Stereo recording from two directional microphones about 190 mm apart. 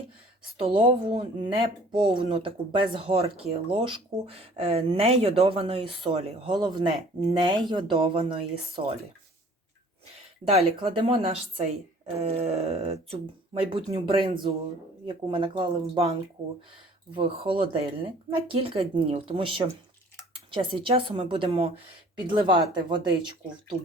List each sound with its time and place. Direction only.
0.6 s speech: 25° right (ahead or behind)
10.5 s speech: 30° right (ahead or behind)
17.2 s speech: 30° right (ahead or behind)